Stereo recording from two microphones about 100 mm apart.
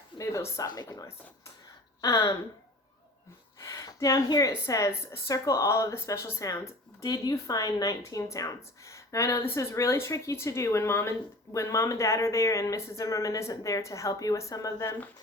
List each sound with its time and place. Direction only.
0.2 s a woman's voice: 30° left (ahead or behind)
3.6 s a woman's voice: 35° left (ahead or behind)